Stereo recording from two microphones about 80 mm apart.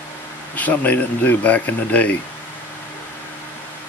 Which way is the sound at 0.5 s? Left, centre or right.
Centre.